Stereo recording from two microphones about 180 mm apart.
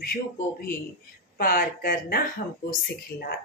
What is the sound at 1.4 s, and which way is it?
Speech, 55° left (ahead or behind).